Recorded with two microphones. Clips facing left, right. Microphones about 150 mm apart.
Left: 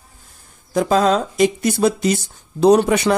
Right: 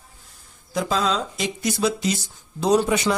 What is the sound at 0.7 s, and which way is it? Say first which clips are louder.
Speech: left 7 dB; 50° left (ahead or behind).